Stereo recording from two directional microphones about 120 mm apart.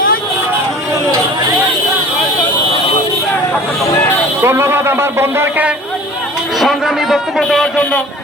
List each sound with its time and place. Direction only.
4.4 s speech: 20° right (ahead or behind)
6.6 s speech: centre (ahead or behind)